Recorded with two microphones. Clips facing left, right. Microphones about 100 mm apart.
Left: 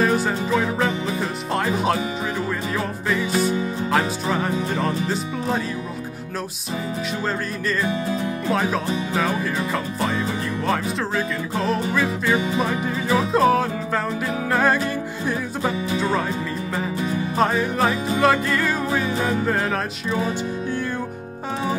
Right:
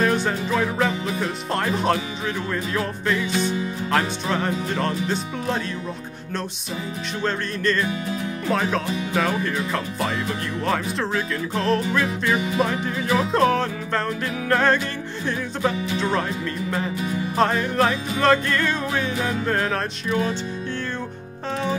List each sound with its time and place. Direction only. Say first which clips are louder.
0.0 s music: left 1 dB; 5° left (ahead or behind)
3.3 s music: left 3 dB; 40° left (ahead or behind)
3.9 s music: even; 5° left (ahead or behind)
7.2 s music: right 5 dB; 5° left (ahead or behind)
10.6 s music: even; centre (ahead or behind)
17.4 s music: even; 5° left (ahead or behind)